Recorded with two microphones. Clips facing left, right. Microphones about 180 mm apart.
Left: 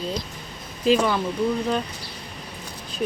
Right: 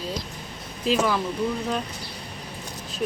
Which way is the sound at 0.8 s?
Centre (ahead or behind).